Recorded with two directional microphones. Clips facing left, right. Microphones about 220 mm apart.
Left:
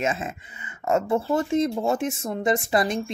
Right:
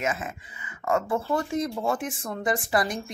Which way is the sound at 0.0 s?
25° left (ahead or behind).